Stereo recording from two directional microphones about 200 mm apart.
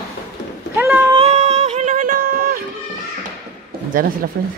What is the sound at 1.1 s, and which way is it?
Music, 30° right (ahead or behind).